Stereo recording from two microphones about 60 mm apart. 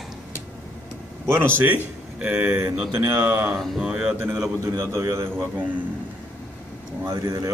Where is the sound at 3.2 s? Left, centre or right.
Right.